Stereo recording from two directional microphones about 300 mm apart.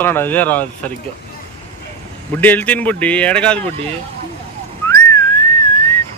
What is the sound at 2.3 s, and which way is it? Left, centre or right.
Speech, centre.